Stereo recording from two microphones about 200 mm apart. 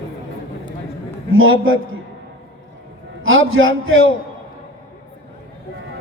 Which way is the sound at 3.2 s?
75° right (ahead or behind).